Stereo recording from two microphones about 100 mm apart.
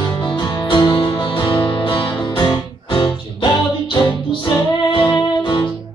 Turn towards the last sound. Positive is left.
turn(degrees=55)  # may be behind; listen again after turning